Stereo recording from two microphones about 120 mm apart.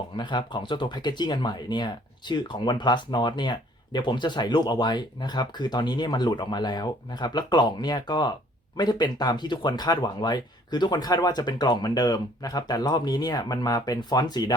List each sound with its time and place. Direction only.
0.2 s speech: 40° left (ahead or behind)